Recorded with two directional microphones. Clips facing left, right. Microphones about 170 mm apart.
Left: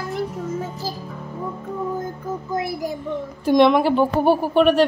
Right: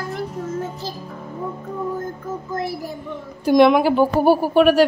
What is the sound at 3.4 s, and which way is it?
A woman's voice, centre (ahead or behind).